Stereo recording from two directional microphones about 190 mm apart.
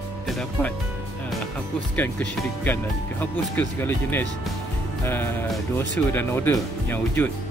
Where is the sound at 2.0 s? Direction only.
10° left (ahead or behind).